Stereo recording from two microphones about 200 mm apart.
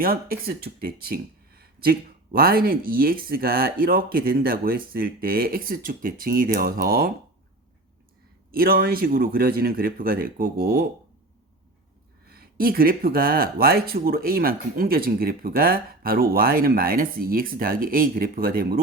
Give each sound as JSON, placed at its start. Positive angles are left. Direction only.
{"t": 0.0, "sound": "speech", "side_deg": -45}
{"t": 8.5, "sound": "speech", "side_deg": -50}
{"t": 12.2, "sound": "speech", "side_deg": -50}